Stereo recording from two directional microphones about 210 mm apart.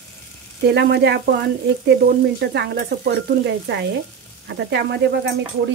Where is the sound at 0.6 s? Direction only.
50° right (ahead or behind).